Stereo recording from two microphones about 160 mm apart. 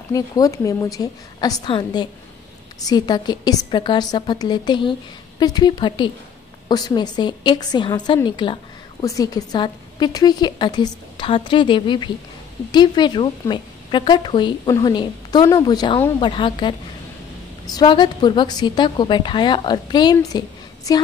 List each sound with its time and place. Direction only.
0.1 s a woman's voice: 20° left (ahead or behind)